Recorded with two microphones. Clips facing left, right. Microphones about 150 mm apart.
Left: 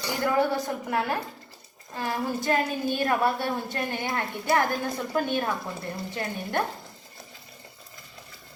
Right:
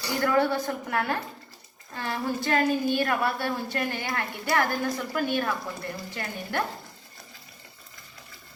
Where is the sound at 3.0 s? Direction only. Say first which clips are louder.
Left 2 dB; 25° left (ahead or behind).